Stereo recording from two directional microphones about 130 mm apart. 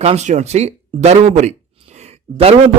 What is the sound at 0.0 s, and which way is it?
Speech, 55° right (ahead or behind).